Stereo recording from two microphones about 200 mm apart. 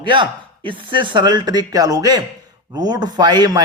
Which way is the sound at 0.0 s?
25° right (ahead or behind).